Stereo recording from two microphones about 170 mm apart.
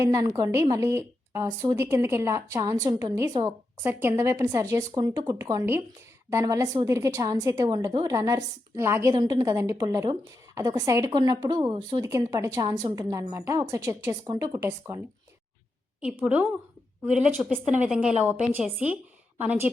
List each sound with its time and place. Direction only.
0.0 s a woman's voice: 20° right (ahead or behind)